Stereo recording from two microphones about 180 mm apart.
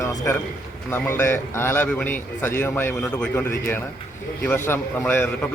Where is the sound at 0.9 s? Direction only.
15° left (ahead or behind).